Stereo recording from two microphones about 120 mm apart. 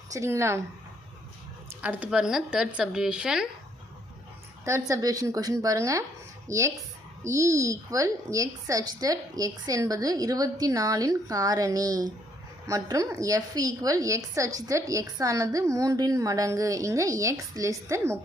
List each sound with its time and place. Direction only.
0.1 s a woman's voice: 25° right (ahead or behind)
1.8 s a woman's voice: 10° right (ahead or behind)
4.6 s a woman's voice: 25° right (ahead or behind)